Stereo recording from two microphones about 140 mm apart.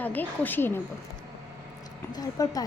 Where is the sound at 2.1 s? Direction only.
25° left (ahead or behind).